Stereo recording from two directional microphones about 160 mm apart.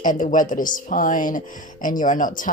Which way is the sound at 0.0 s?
55° left (ahead or behind).